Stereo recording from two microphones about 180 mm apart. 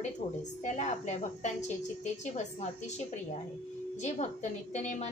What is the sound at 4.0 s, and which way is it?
A woman's voice, 40° left (ahead or behind).